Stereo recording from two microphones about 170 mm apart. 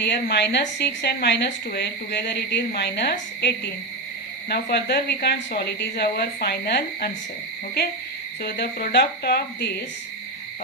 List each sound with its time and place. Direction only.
0.0 s a woman's voice: 80° left
8.4 s a woman's voice: 65° left (ahead or behind)